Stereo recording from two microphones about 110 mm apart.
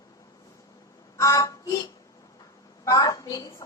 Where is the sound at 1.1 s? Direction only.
30° left (ahead or behind).